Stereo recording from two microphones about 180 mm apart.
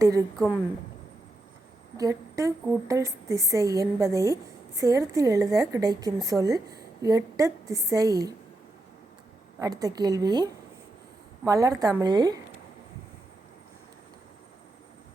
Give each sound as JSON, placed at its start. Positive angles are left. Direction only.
{"t": 0.0, "sound": "a woman's voice", "side_deg": -20}
{"t": 2.0, "sound": "a woman's voice", "side_deg": -20}
{"t": 9.6, "sound": "a woman's voice", "side_deg": -20}